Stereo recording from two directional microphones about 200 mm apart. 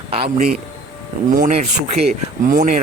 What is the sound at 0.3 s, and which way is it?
Speech, 50° right (ahead or behind).